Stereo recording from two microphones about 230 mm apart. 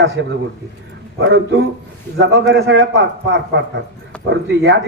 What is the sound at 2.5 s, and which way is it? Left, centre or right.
Speech, right.